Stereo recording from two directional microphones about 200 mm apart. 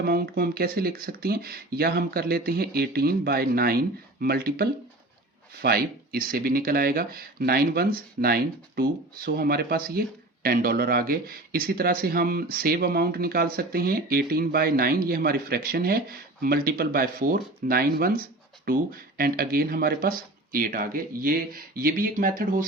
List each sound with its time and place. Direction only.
0.0 s speech: 50° right (ahead or behind)